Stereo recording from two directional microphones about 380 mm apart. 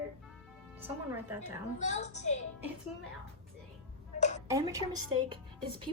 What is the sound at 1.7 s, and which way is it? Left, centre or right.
Speech, centre.